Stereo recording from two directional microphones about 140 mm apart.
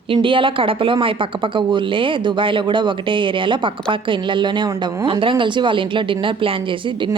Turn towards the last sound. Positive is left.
turn(degrees=-40)  # may be behind; listen again after turning